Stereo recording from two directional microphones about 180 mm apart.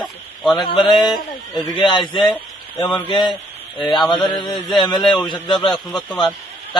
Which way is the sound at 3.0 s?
25° left (ahead or behind).